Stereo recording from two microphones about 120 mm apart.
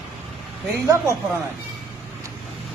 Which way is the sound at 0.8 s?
25° right (ahead or behind).